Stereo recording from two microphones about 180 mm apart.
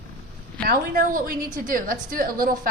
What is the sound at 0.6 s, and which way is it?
A woman's voice, 55° right (ahead or behind).